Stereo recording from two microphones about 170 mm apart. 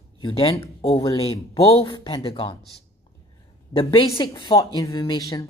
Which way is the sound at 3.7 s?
30° left (ahead or behind).